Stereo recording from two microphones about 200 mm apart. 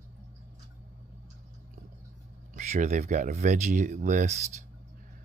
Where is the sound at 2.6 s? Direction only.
35° right (ahead or behind).